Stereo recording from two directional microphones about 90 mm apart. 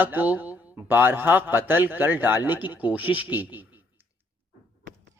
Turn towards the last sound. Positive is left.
turn(degrees=-20)  # may be behind; listen again after turning